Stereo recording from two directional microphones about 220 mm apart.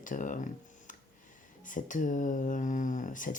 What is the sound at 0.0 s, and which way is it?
Speech, 35° left (ahead or behind).